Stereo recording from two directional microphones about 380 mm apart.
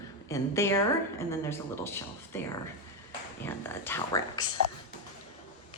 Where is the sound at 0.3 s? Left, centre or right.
Centre.